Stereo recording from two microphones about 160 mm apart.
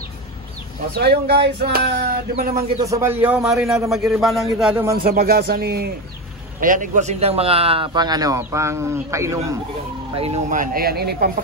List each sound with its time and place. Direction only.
0.9 s a sound: 85° right
2.8 s a man's voice: 20° right (ahead or behind); by 4.7 s centre (ahead or behind)
4.9 s a man's voice: 70° right (ahead or behind)
6.6 s speech: 55° right (ahead or behind); by 9.4 s 20° right (ahead or behind)
10.1 s speech: 40° right (ahead or behind)
10.5 s a man's voice: 60° right (ahead or behind); by 11.3 s 75° right (ahead or behind)